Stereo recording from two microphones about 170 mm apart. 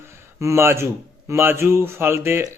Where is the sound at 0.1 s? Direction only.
15° right (ahead or behind).